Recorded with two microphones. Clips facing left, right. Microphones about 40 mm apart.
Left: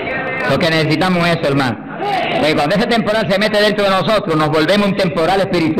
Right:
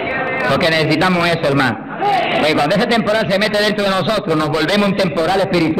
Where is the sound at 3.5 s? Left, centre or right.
Centre.